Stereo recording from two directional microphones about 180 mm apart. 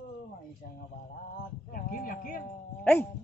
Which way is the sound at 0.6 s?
55° left (ahead or behind).